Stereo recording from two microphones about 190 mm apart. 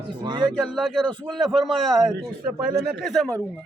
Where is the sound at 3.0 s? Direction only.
Centre (ahead or behind).